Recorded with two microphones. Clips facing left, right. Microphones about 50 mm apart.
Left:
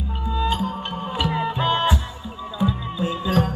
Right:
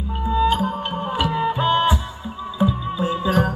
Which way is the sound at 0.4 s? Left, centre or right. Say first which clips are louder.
Right 4 dB; right.